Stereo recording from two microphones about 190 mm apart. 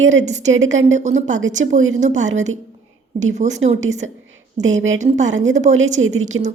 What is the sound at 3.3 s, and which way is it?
Speech, 35° right (ahead or behind).